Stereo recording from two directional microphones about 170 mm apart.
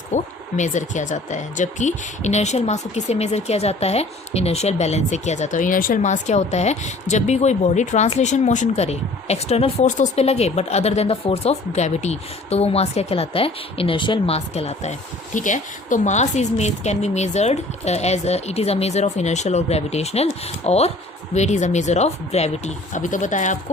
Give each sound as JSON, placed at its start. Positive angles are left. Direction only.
{"t": 0.1, "sound": "speech", "side_deg": 45}